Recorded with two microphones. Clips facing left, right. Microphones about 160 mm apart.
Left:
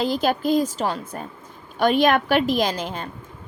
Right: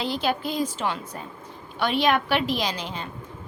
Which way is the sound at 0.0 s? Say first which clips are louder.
Left 5 dB; 45° left (ahead or behind).